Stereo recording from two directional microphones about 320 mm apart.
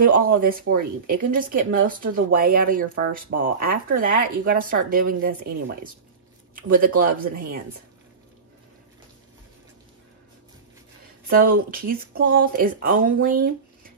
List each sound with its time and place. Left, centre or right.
0.2 s speech: right
11.2 s speech: right